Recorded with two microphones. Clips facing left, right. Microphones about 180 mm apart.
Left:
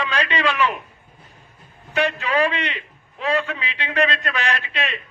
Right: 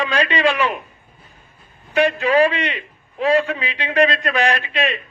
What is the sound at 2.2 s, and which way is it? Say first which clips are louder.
A man's voice: right 5 dB; 35° right (ahead or behind).